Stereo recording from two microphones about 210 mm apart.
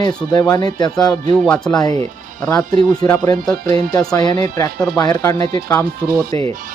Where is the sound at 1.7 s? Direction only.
15° left (ahead or behind).